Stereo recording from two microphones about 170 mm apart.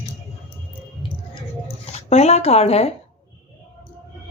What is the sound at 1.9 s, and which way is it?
Speech, 40° left (ahead or behind).